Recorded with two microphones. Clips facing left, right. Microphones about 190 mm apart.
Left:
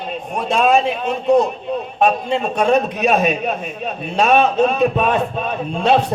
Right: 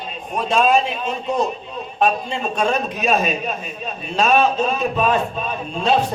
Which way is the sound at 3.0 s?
60° left (ahead or behind).